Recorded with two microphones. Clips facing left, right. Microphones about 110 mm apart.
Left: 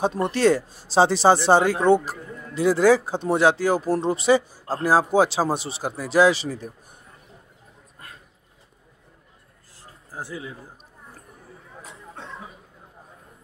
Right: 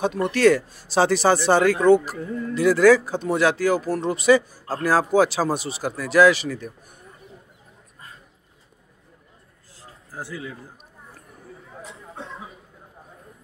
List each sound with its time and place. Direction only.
0.0 s speech: 30° left (ahead or behind)
10.1 s speech: 20° left (ahead or behind)